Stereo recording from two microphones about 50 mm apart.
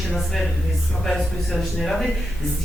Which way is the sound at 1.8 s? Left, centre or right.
Centre.